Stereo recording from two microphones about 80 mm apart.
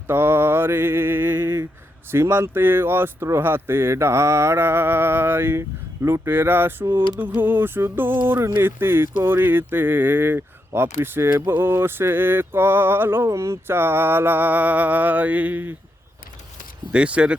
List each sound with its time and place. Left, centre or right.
0.1 s speech: right
16.9 s speech: centre